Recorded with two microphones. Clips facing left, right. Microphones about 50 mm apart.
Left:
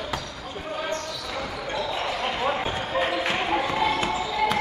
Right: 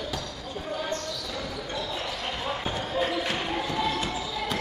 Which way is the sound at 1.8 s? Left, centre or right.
Left.